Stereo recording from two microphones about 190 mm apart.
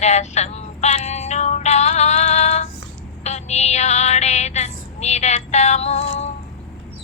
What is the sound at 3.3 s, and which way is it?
Music, 35° left (ahead or behind).